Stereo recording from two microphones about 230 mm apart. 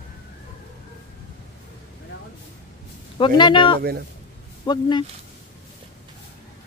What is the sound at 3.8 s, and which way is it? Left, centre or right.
Speech, right.